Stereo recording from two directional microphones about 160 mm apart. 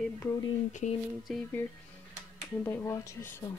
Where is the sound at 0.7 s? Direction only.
50° left (ahead or behind).